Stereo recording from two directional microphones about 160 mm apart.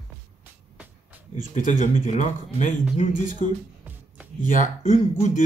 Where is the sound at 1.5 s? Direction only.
50° left (ahead or behind).